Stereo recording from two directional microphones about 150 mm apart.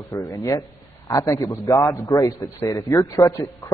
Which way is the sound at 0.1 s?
25° left (ahead or behind).